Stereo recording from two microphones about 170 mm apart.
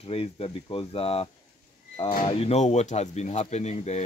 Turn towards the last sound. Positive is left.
turn(degrees=40)  # may be behind; listen again after turning